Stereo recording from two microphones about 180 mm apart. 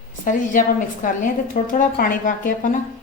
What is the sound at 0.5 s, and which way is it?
A woman's voice, 45° left (ahead or behind).